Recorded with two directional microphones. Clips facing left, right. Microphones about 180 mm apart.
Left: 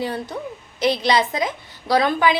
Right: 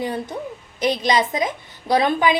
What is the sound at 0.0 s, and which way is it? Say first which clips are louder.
A woman's voice: even; 20° right (ahead or behind).